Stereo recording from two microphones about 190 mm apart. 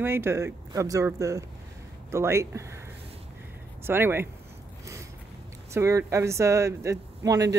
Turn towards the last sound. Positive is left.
turn(degrees=-20)  # may be behind; listen again after turning